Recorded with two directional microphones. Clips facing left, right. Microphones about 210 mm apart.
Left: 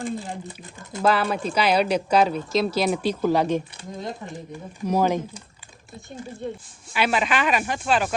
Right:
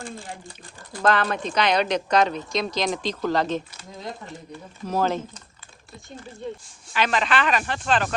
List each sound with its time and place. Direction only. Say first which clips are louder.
0.0 s speech: left 7 dB; 20° left (ahead or behind)
1.0 s a woman's voice: left 1 dB; 10° left (ahead or behind)
4.8 s a woman's voice: left 3 dB; 15° left (ahead or behind)
6.9 s a woman's voice: even; 10° left (ahead or behind)